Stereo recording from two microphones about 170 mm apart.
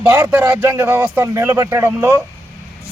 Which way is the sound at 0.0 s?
10° right (ahead or behind).